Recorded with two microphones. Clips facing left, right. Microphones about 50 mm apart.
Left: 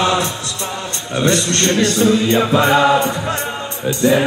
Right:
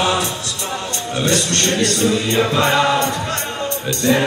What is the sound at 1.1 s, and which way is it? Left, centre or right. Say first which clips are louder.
Speech: left 3 dB; left.